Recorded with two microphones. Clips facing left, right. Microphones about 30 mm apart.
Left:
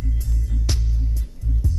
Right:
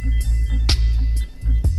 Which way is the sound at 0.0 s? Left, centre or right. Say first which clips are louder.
Right 2 dB; right.